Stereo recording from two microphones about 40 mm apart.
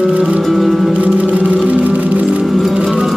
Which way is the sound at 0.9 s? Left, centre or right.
Right.